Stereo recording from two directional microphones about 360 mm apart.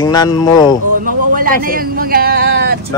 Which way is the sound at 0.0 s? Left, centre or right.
Centre.